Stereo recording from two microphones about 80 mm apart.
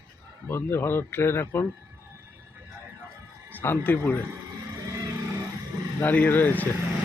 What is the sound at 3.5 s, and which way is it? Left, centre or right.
Speech, left.